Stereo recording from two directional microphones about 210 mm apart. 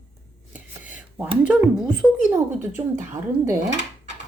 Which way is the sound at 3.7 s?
60° right (ahead or behind).